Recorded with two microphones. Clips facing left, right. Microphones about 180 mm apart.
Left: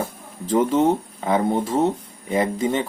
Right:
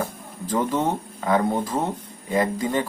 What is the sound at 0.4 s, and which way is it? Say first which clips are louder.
Speech: left 5 dB; 25° left (ahead or behind).